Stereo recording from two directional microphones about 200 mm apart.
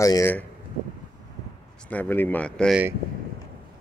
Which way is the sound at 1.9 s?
10° left (ahead or behind).